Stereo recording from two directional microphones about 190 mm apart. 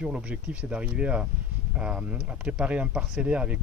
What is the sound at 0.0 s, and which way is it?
Speech, 5° right (ahead or behind).